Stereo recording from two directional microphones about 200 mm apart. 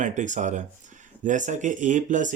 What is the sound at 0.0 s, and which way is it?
Speech, 40° right (ahead or behind).